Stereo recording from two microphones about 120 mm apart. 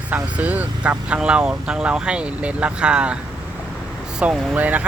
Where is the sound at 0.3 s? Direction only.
10° right (ahead or behind).